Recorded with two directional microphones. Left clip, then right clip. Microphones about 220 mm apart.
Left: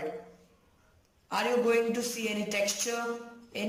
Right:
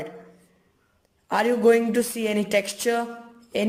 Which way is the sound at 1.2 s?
35° right (ahead or behind).